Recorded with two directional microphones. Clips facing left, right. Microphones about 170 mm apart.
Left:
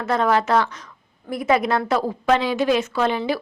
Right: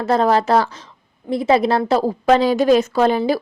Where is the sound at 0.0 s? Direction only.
35° right (ahead or behind).